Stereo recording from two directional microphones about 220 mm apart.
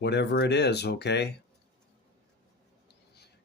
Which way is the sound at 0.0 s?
50° left (ahead or behind).